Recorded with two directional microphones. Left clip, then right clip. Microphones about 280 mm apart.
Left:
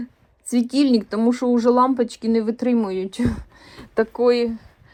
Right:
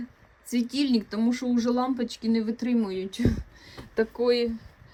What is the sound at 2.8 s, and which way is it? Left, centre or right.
Speech, centre.